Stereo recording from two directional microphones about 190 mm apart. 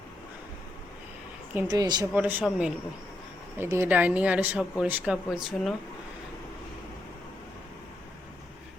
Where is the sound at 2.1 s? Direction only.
5° right (ahead or behind).